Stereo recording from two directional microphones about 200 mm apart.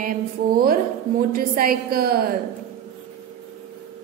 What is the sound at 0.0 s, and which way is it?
A woman's voice, 50° right (ahead or behind).